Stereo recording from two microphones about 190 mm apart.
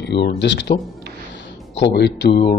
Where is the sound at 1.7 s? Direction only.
65° left (ahead or behind).